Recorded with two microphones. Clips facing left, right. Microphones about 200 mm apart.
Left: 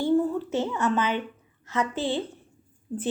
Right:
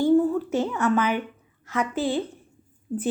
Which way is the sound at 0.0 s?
15° right (ahead or behind).